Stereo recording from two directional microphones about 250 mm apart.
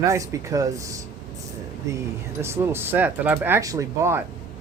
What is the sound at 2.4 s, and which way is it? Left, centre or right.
Speech, centre.